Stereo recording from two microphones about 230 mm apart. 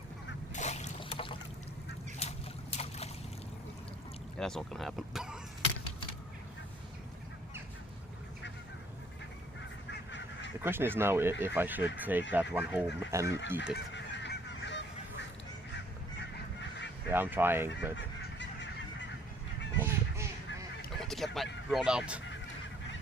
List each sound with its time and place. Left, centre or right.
0.5 s boat: left
2.1 s a sound: left
4.4 s speech: centre
9.9 s goose: left
10.6 s speech: centre
13.7 s goose: left
16.6 s goose: left
17.1 s speech: centre
17.9 s goose: left
19.8 s a sound: centre
21.0 s a sound: centre
21.3 s honk: centre